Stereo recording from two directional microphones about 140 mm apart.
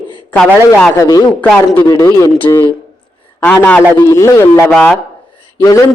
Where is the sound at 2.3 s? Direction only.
15° left (ahead or behind).